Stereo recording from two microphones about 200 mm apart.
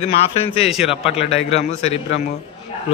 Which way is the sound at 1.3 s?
30° left (ahead or behind).